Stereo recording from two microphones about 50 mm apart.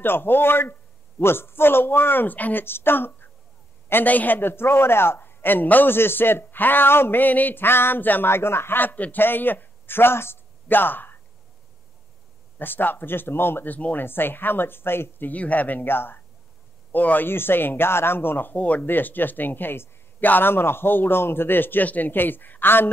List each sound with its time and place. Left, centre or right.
0.0 s a man's voice: left
2.6 s a man's voice: left
3.9 s a man's voice: left
8.3 s a man's voice: left
12.5 s a man's voice: left
16.9 s speech: left
17.3 s a man's voice: left
18.6 s speech: left
18.9 s a man's voice: left